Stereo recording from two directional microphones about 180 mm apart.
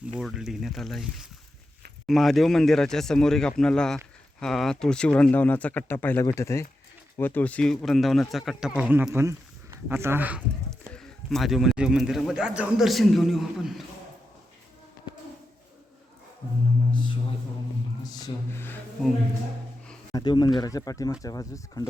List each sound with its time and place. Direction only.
0.0 s speech: 5° right (ahead or behind)
10.9 s speech: 5° left (ahead or behind)
16.9 s speech: 25° left (ahead or behind)
20.1 s speech: 25° left (ahead or behind)